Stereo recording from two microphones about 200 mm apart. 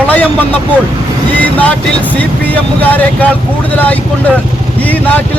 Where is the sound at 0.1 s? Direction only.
5° left (ahead or behind).